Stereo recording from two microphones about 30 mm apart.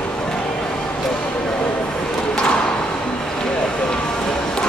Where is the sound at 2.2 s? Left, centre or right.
Left.